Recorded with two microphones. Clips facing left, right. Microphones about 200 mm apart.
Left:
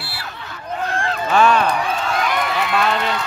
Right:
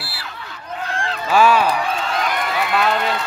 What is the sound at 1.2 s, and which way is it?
A man's voice, 5° right (ahead or behind).